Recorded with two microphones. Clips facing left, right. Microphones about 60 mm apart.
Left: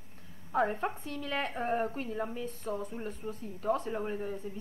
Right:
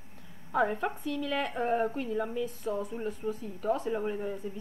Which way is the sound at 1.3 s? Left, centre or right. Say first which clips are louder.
Right 2 dB; centre.